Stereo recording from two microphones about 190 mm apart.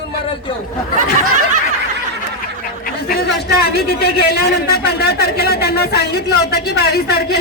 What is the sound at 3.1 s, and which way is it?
A man's voice, 55° left (ahead or behind).